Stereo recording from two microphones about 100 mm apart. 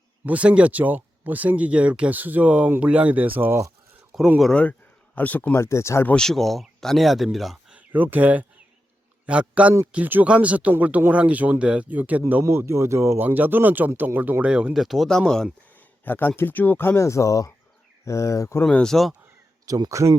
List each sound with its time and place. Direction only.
0.3 s speech: 15° right (ahead or behind)
4.4 s speech: 5° left (ahead or behind)
5.1 s speech: 15° left (ahead or behind)
5.5 s speech: 30° left (ahead or behind)
6.1 s speech: 5° left (ahead or behind)
7.8 s speech: 15° right (ahead or behind); by 15.2 s centre (ahead or behind)
16.0 s speech: 20° left (ahead or behind)
18.6 s speech: 5° left (ahead or behind)
19.6 s speech: 35° right (ahead or behind)